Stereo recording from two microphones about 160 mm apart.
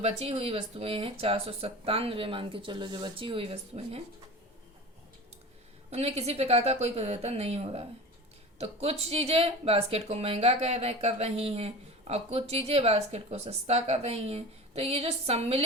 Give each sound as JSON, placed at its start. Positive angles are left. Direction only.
{"t": 0.0, "sound": "speech", "side_deg": -40}
{"t": 5.9, "sound": "speech", "side_deg": -40}